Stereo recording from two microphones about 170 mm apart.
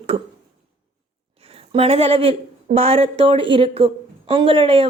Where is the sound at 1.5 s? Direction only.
35° right (ahead or behind).